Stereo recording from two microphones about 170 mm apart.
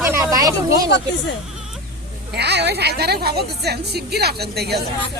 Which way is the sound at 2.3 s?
80° right.